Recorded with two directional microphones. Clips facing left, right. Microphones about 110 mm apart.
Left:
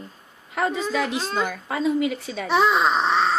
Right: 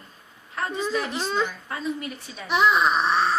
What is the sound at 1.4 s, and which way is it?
A woman's voice, 80° left.